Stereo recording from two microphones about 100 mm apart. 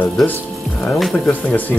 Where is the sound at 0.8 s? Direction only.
Centre (ahead or behind).